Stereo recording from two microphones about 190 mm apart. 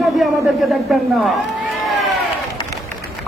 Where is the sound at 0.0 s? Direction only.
Centre (ahead or behind).